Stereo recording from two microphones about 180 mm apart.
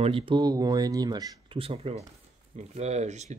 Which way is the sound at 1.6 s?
35° right (ahead or behind).